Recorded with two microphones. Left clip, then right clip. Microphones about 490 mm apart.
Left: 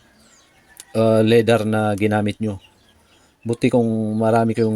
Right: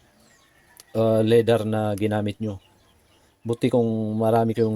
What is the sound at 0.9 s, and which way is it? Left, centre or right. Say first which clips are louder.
Speech: left 4 dB; right.